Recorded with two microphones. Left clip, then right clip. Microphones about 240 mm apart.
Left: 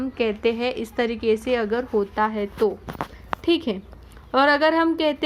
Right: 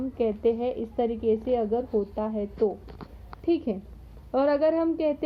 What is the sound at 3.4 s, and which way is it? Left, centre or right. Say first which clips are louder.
A woman's voice: left 4 dB; left.